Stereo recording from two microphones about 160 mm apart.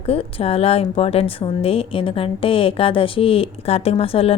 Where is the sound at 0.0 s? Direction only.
35° left (ahead or behind).